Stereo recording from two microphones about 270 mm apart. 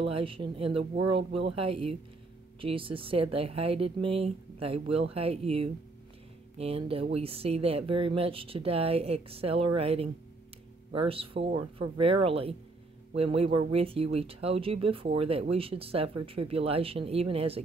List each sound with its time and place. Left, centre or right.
0.1 s speech: centre